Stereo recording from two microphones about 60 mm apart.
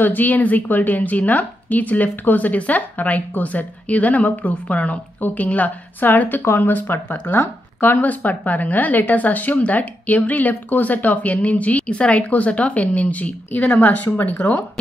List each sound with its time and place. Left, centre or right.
0.0 s speech: left
6.4 s speech: left
6.7 s speech: left